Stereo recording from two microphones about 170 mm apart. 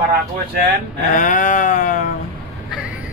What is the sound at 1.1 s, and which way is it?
Sheep, 50° left (ahead or behind).